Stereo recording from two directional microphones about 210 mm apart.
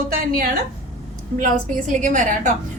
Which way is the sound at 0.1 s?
45° right (ahead or behind).